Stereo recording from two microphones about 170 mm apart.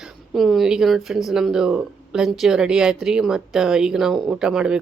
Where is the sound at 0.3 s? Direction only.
Centre (ahead or behind).